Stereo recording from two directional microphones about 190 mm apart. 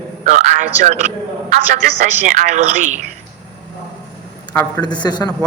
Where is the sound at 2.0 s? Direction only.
40° right (ahead or behind).